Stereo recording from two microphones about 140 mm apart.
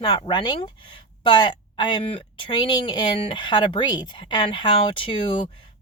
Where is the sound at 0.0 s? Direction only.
30° left (ahead or behind).